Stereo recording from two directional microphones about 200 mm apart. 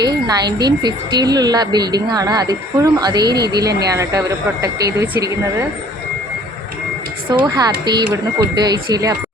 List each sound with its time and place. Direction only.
0.0 s a woman's voice: 20° right (ahead or behind)
7.3 s a woman's voice: 20° right (ahead or behind)